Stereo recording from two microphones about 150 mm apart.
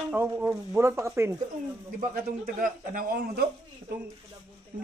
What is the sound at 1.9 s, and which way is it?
A man's voice, 70° right (ahead or behind).